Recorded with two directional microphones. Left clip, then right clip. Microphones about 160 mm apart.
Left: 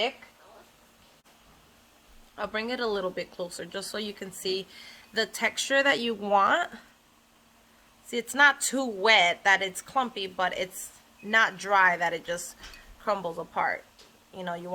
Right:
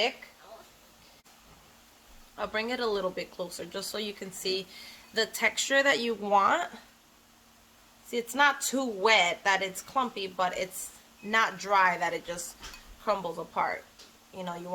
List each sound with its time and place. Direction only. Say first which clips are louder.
2.3 s speech: even; 35° left (ahead or behind)
8.1 s speech: left 3 dB; 35° left (ahead or behind)